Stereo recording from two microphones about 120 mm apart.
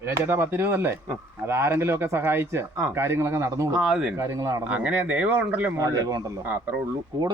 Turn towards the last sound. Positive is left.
turn(degrees=-30)  # may be behind; listen again after turning